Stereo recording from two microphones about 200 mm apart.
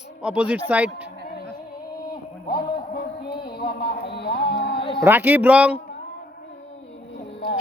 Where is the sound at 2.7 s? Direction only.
50° left (ahead or behind).